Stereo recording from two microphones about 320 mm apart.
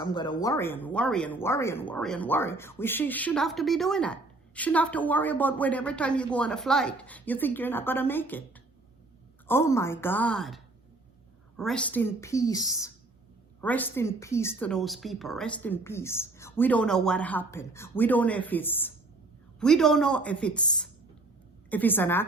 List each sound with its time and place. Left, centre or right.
0.0 s a woman's voice: centre